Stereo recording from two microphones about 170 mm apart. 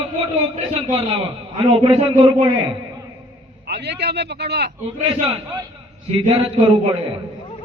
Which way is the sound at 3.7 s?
75° right (ahead or behind).